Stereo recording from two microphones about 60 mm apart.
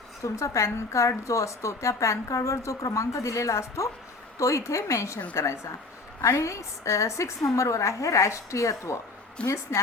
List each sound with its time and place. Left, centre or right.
0.2 s a woman's voice: left